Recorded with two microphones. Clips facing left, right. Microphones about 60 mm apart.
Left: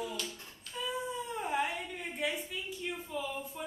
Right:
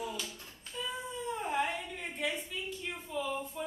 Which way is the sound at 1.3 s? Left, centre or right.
Centre.